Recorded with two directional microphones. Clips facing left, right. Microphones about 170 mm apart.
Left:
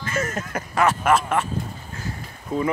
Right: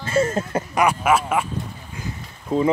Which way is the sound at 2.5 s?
25° right (ahead or behind).